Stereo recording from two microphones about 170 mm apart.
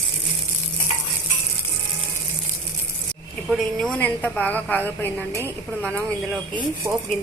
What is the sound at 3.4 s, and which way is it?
A woman's voice, centre (ahead or behind).